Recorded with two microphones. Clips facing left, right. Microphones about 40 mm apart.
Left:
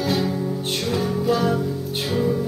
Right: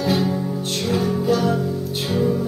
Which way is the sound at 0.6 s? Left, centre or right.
Left.